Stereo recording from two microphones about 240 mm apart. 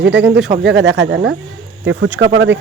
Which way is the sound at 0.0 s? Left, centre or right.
Right.